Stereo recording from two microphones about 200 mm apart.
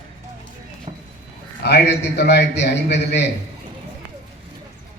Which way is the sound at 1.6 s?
55° left (ahead or behind).